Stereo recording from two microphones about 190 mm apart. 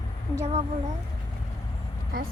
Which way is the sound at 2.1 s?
50° right (ahead or behind).